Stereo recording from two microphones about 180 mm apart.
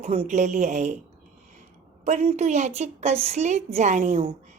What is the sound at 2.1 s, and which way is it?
Speech, 40° right (ahead or behind).